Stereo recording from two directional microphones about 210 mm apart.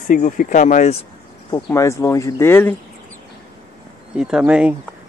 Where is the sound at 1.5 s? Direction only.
15° left (ahead or behind).